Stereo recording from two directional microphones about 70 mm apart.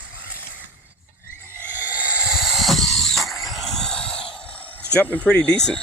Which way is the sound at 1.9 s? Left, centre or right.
Right.